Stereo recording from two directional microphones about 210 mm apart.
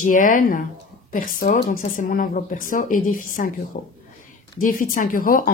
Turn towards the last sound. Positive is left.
turn(degrees=40)  # may be behind; listen again after turning